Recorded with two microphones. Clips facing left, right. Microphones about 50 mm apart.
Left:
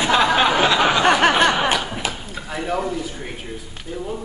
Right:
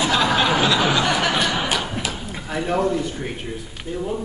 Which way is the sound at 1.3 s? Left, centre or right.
Left.